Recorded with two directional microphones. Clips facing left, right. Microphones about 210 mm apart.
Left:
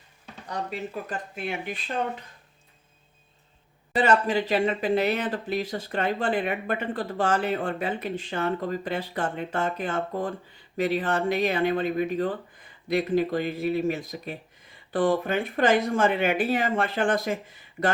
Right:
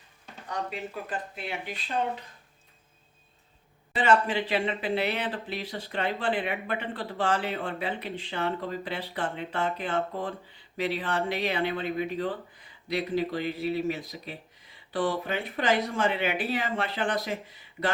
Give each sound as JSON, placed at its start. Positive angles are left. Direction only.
{"t": 1.4, "sound": "speech", "side_deg": 50}
{"t": 3.9, "sound": "speech", "side_deg": 40}